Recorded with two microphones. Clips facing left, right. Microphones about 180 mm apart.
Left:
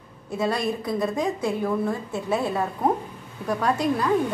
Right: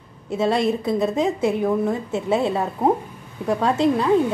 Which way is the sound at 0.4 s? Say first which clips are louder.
Right 5 dB; 25° right (ahead or behind).